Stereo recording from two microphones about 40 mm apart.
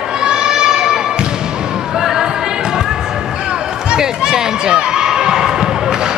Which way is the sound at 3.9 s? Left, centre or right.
Centre.